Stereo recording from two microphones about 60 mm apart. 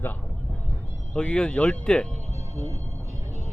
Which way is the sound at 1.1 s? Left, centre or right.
Centre.